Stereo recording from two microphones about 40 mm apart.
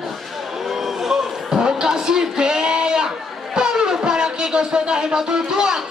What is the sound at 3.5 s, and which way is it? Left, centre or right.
Music, centre.